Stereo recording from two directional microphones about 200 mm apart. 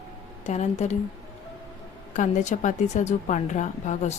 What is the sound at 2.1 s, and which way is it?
A woman's voice, 35° left (ahead or behind).